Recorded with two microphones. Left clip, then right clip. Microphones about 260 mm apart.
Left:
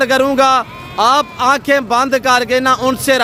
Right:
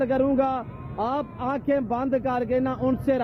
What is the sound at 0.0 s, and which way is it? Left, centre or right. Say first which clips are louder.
A man's voice: left 11 dB; centre.